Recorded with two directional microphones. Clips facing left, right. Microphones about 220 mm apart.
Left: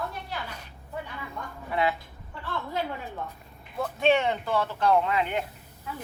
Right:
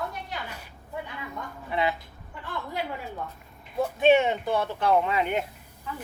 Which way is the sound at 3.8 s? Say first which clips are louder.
Right 3 dB; 15° right (ahead or behind).